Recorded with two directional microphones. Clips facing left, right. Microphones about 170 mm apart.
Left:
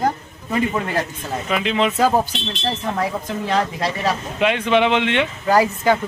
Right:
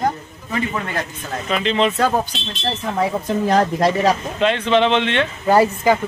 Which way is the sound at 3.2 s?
45° right (ahead or behind).